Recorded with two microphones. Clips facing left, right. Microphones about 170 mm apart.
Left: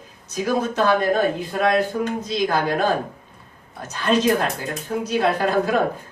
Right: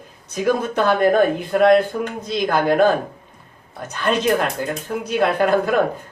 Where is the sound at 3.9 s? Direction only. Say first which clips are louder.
Even; 55° right (ahead or behind).